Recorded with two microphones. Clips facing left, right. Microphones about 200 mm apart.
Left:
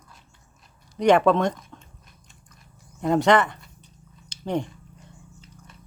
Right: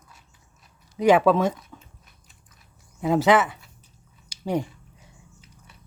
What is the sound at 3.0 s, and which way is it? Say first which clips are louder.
Speech: even; 5° right (ahead or behind).